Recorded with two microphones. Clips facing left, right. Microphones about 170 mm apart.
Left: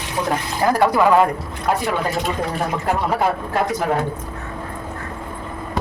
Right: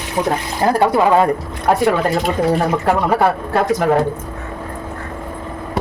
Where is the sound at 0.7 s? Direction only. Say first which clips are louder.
Right 2 dB; 30° right (ahead or behind).